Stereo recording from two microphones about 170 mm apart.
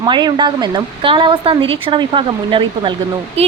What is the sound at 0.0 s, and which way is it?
A woman's voice, 25° right (ahead or behind).